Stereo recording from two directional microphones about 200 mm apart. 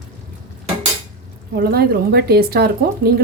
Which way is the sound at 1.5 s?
50° right (ahead or behind).